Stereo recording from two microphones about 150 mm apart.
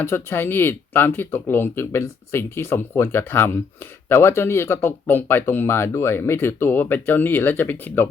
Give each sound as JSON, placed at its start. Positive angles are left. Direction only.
{"t": 0.0, "sound": "speech", "side_deg": 15}